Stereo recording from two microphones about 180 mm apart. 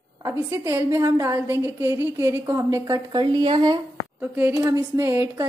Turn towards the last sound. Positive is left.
turn(degrees=-15)  # may be behind; listen again after turning